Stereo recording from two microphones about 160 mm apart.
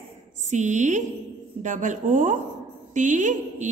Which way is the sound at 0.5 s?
50° right (ahead or behind).